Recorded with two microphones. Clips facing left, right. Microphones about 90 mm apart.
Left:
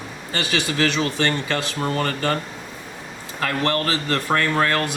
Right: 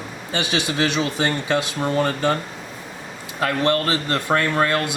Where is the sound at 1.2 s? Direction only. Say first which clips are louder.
Right 2 dB; 15° right (ahead or behind).